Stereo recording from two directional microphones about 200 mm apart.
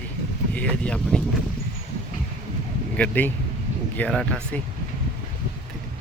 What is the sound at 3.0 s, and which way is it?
Speech, 10° left (ahead or behind).